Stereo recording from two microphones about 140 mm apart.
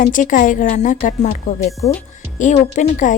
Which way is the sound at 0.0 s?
65° left (ahead or behind).